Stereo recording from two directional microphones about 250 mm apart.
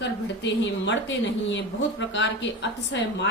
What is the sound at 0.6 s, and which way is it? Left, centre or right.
A woman's voice, left.